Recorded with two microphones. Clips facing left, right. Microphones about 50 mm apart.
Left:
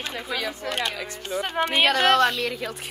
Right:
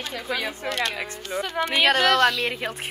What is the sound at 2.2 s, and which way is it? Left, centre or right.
Speech, right.